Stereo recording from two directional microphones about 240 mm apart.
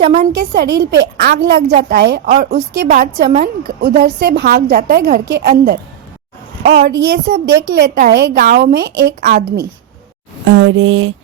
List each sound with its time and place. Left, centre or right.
0.2 s a woman's voice: right
6.8 s a woman's voice: right
10.4 s a sound: right